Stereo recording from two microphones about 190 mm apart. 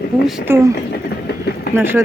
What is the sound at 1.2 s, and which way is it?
Train, 55° left (ahead or behind).